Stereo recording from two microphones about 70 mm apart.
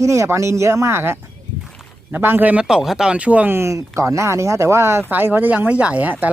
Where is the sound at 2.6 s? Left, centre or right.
Centre.